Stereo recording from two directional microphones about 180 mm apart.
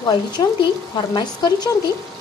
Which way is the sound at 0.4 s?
25° left (ahead or behind).